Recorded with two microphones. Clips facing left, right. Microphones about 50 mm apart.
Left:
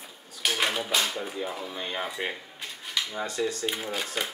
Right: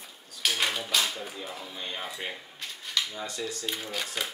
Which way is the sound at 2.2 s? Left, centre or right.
Centre.